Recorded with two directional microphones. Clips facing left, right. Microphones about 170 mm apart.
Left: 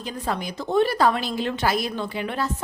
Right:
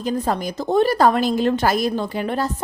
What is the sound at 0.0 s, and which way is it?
A woman's voice, 40° right (ahead or behind).